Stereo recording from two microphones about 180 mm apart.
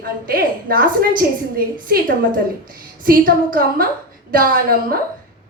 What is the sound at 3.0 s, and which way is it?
A woman's voice, 50° right (ahead or behind).